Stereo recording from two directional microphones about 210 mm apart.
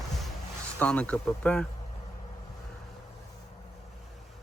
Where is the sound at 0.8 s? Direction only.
5° left (ahead or behind).